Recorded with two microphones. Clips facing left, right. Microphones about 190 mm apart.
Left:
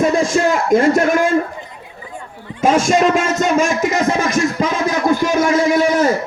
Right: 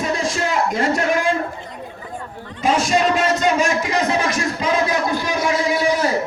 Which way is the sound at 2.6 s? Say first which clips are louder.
Left 4 dB; 45° left (ahead or behind).